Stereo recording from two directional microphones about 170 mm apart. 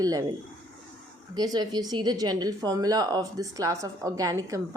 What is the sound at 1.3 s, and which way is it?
A woman's voice, 25° right (ahead or behind).